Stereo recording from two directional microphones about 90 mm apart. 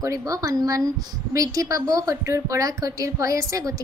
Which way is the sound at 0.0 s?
40° right (ahead or behind).